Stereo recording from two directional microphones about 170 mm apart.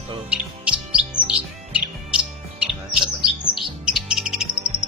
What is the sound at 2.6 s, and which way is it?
Chirp, 5° right (ahead or behind).